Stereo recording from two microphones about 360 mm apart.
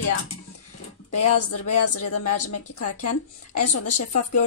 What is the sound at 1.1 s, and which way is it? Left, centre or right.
A woman's voice, left.